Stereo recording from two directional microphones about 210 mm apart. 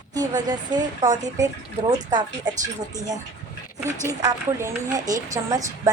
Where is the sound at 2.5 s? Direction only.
20° right (ahead or behind).